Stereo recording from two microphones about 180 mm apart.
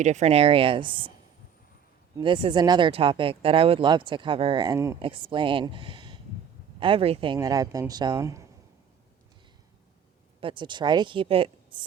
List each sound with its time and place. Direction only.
0.0 s speech: 40° right (ahead or behind)
2.1 s speech: 25° right (ahead or behind)
4.9 s speech: 30° right (ahead or behind)
7.3 s speech: 20° right (ahead or behind)
10.4 s speech: 25° right (ahead or behind)